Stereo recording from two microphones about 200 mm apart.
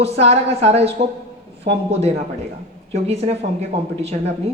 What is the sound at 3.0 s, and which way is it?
Speech, 30° right (ahead or behind).